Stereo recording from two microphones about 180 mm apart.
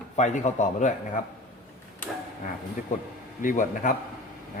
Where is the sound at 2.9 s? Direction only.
45° left (ahead or behind).